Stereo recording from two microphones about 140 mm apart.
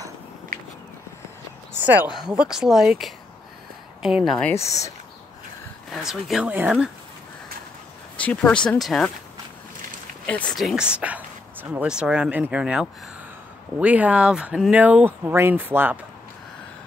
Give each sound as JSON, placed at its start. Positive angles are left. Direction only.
{"t": 0.5, "sound": "walk", "side_deg": -80}
{"t": 1.7, "sound": "speech", "side_deg": -15}
{"t": 4.5, "sound": "speech", "side_deg": 20}
{"t": 5.9, "sound": "speech", "side_deg": 0}
{"t": 8.2, "sound": "speech", "side_deg": 10}
{"t": 10.6, "sound": "speech", "side_deg": -5}